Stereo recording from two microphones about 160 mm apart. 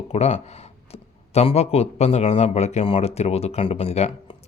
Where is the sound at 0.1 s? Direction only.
40° left (ahead or behind).